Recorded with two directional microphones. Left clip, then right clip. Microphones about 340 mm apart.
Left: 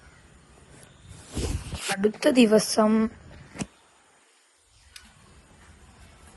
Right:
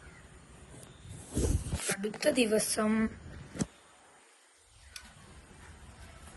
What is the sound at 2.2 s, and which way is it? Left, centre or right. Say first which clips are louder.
Speech: left 8 dB; centre.